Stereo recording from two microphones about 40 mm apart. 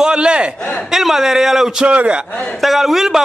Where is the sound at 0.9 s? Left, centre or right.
Centre.